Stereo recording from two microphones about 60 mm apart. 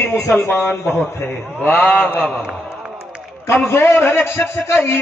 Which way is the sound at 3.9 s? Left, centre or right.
Left.